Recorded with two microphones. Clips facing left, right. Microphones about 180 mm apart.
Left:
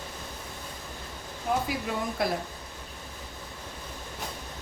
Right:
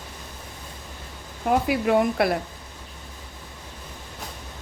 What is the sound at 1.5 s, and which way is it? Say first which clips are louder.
Speech: right 9 dB; 65° right (ahead or behind).